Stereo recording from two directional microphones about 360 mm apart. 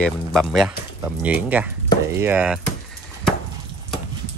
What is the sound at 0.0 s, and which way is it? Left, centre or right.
Speech, centre.